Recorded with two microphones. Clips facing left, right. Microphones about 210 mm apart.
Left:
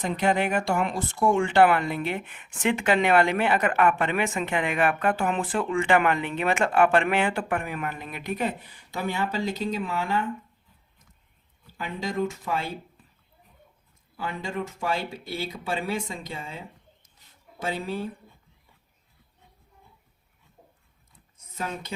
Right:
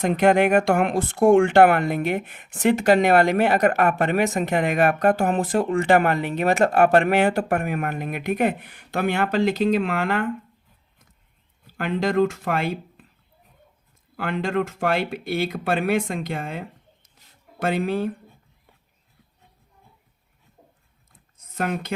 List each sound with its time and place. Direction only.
0.0 s speech: 55° right (ahead or behind); by 10.3 s 75° right (ahead or behind)
11.8 s speech: 75° right (ahead or behind)
14.2 s speech: 75° right (ahead or behind)
21.6 s speech: 65° right (ahead or behind)